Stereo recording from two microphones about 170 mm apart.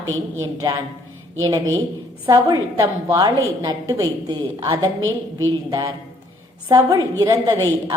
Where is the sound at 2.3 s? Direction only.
20° right (ahead or behind).